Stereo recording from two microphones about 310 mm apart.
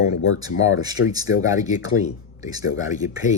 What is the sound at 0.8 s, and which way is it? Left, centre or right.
Speech, centre.